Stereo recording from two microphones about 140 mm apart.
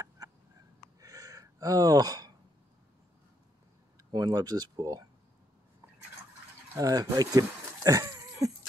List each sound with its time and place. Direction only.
0.2 s a sound: 25° right (ahead or behind)
1.0 s gasp: 25° right (ahead or behind)
4.1 s speech: 30° right (ahead or behind)
6.7 s speech: 25° right (ahead or behind)